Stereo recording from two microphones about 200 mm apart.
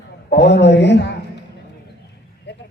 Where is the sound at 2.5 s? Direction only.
60° left (ahead or behind).